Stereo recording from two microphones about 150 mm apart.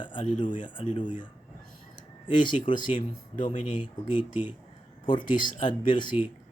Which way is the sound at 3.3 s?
60° left (ahead or behind).